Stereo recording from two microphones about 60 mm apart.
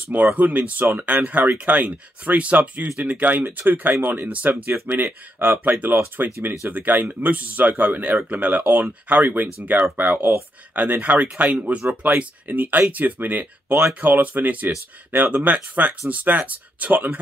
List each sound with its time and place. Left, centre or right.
0.4 s speech: right